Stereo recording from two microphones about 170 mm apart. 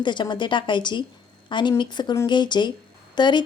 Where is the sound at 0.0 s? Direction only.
25° left (ahead or behind).